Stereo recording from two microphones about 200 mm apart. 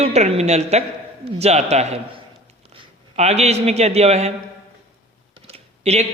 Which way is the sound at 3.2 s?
35° right (ahead or behind).